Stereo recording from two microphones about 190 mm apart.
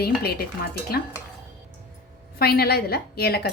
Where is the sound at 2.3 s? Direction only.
55° left (ahead or behind).